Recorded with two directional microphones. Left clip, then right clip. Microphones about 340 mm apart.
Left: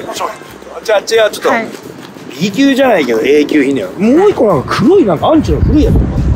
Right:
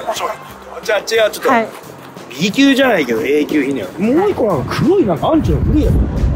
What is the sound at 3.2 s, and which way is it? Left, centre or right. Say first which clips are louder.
Speech: left 5 dB; left.